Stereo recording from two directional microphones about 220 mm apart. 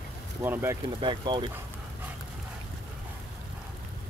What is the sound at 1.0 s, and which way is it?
Speech, 20° right (ahead or behind).